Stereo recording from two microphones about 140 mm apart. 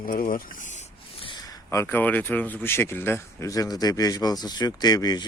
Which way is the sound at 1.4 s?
20° left (ahead or behind).